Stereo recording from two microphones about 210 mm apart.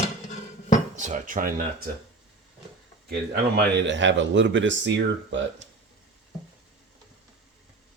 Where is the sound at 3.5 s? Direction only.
55° right (ahead or behind).